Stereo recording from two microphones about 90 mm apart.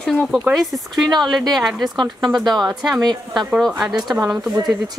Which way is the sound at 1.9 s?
50° right (ahead or behind).